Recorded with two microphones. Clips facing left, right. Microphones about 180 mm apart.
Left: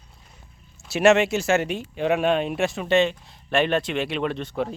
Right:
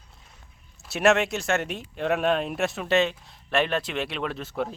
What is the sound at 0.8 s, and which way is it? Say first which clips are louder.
Speech: left 4 dB; centre (ahead or behind).